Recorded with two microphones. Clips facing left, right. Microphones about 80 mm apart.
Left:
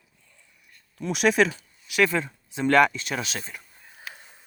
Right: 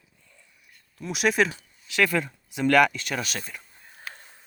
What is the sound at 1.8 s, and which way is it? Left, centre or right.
Speech, centre.